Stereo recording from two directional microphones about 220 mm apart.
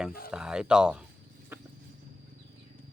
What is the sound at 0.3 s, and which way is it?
Speech, 5° right (ahead or behind).